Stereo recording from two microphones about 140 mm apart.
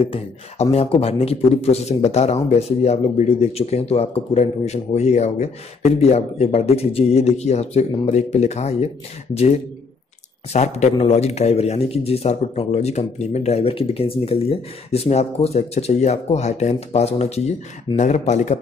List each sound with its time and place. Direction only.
0.0 s a man's voice: 45° left (ahead or behind)
10.5 s a man's voice: 55° left (ahead or behind)